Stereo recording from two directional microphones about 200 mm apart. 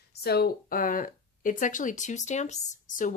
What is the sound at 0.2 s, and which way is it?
Speech, 50° left (ahead or behind).